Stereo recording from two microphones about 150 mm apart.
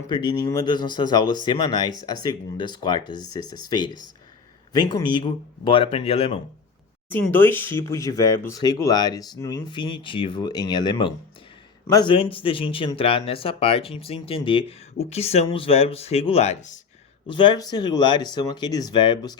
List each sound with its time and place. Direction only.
0.1 s speech: 25° left (ahead or behind)
3.4 s speech: 75° right (ahead or behind)
3.7 s speech: 30° left (ahead or behind)
7.1 s speech: 15° left (ahead or behind); by 16.8 s 55° left (ahead or behind)
17.2 s speech: 30° left (ahead or behind)